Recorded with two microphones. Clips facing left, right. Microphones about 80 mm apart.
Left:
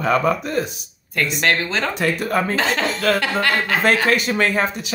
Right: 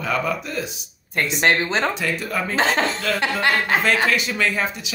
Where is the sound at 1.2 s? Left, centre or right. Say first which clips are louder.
Even; right.